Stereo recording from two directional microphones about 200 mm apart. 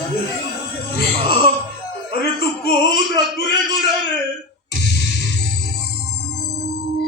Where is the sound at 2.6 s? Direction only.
55° left (ahead or behind).